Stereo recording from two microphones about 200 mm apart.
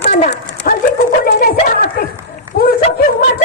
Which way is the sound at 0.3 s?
40° left (ahead or behind).